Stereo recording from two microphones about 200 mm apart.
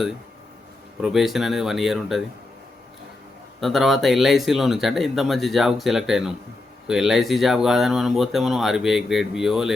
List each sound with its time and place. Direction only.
1.0 s speech: centre (ahead or behind)
3.6 s speech: centre (ahead or behind)